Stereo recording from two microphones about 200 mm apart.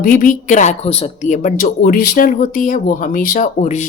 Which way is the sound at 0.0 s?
40° left (ahead or behind).